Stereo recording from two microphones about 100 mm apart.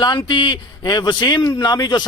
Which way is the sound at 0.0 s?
50° left (ahead or behind).